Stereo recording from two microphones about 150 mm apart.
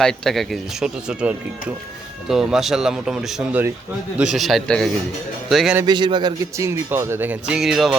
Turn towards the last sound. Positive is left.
turn(degrees=0)  # may be behind; listen again after turning